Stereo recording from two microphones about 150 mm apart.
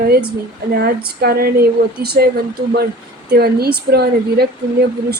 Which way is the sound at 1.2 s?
90° right.